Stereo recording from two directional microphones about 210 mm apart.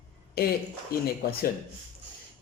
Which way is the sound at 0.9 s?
45° left (ahead or behind).